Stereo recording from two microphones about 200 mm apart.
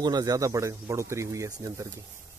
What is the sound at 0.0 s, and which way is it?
Speech, 20° right (ahead or behind).